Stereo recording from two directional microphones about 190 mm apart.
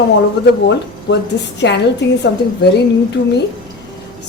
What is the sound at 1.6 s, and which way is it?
Speech, 70° left (ahead or behind).